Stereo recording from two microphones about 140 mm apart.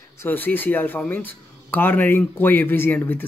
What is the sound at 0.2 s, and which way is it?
Speech, 15° left (ahead or behind).